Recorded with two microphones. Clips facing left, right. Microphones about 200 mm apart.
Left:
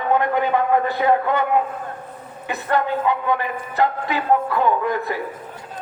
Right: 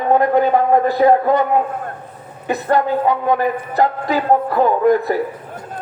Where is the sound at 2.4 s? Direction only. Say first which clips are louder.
Right 5 dB; 40° right (ahead or behind).